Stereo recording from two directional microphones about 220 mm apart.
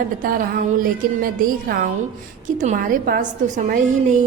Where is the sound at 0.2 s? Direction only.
40° right (ahead or behind).